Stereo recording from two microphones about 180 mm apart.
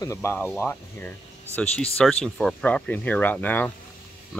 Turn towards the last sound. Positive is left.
turn(degrees=10)  # may be behind; listen again after turning